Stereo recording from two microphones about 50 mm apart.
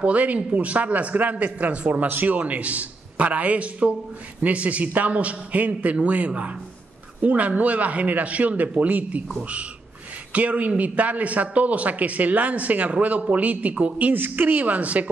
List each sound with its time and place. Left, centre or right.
0.0 s a man's voice: right
14.2 s speech: right